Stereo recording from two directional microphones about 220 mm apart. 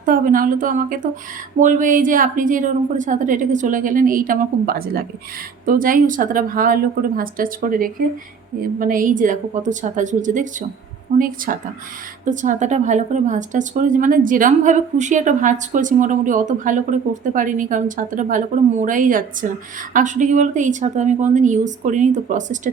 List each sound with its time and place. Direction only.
0.0 s a woman's voice: 40° right (ahead or behind)